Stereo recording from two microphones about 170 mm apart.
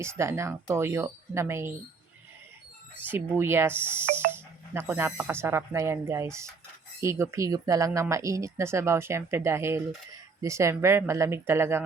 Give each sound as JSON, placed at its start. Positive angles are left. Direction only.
{"t": 0.0, "sound": "speech", "side_deg": -15}
{"t": 3.0, "sound": "speech", "side_deg": -10}